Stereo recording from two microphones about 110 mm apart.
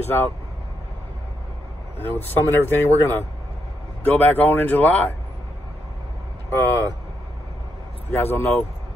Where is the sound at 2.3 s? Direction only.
20° left (ahead or behind).